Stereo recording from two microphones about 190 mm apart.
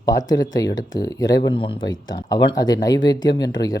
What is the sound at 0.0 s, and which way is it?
Speech, 20° left (ahead or behind).